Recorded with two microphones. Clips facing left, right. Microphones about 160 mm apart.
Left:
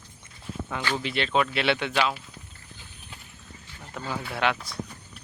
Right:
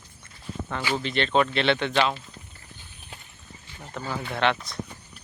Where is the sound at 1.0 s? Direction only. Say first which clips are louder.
Right 3 dB; 5° left (ahead or behind).